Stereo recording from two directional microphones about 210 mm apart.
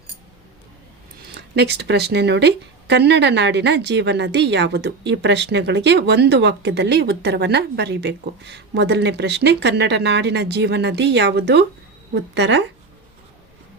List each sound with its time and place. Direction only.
1.2 s speech: 50° right (ahead or behind)